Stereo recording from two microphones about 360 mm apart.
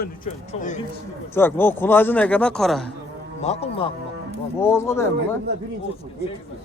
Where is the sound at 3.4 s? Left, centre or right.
Centre.